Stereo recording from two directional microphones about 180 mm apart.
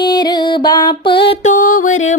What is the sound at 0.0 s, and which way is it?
Music, 25° left (ahead or behind).